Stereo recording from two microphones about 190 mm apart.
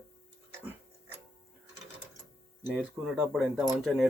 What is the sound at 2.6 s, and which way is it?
Speech, 5° right (ahead or behind).